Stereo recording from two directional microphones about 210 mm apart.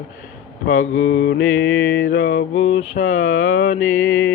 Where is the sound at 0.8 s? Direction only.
70° left (ahead or behind).